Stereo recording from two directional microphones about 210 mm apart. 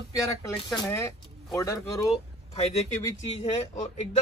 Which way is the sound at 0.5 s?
20° left (ahead or behind).